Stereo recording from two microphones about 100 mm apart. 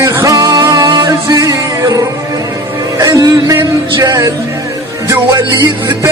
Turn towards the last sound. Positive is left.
turn(degrees=-35)  # may be behind; listen again after turning